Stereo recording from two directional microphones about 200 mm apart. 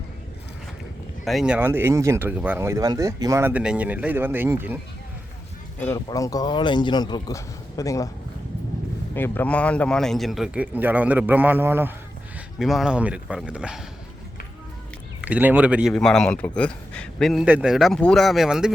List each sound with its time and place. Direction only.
1.2 s speech: centre (ahead or behind)
5.8 s speech: 15° left (ahead or behind)
9.1 s speech: 10° left (ahead or behind)
15.2 s speech: 10° right (ahead or behind)